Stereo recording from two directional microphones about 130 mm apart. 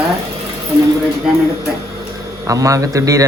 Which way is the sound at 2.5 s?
25° right (ahead or behind).